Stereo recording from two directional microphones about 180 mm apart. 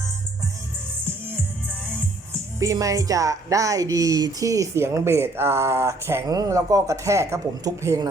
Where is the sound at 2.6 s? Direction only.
20° right (ahead or behind).